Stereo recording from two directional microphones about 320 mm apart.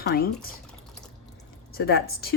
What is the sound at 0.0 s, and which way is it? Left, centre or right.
Speech, left.